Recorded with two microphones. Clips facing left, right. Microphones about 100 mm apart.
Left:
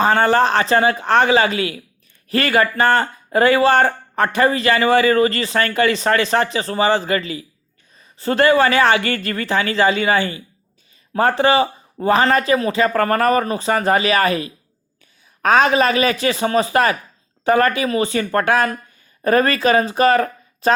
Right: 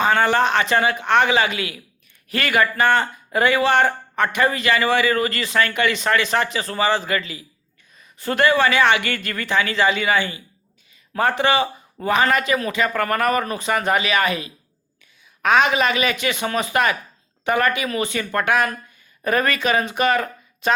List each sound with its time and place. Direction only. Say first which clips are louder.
0.0 s speech: left 3 dB; 35° left (ahead or behind)